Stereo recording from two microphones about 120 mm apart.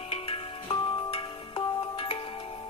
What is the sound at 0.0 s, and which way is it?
Music, 50° left (ahead or behind).